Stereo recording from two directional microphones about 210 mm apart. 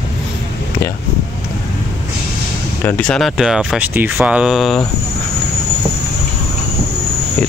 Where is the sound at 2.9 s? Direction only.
5° left (ahead or behind).